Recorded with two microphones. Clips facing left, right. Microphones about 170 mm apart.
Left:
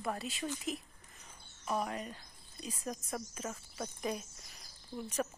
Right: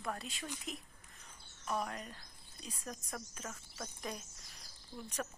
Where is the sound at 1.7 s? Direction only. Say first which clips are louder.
Left 3 dB; 5° left (ahead or behind).